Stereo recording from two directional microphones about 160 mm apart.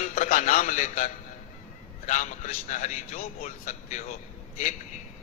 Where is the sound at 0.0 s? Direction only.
55° left (ahead or behind).